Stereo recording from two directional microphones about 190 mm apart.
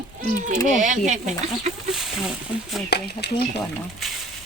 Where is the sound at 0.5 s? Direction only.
40° right (ahead or behind).